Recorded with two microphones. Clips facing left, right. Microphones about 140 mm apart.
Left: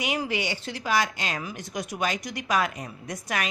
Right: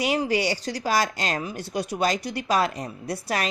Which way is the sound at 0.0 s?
35° right (ahead or behind).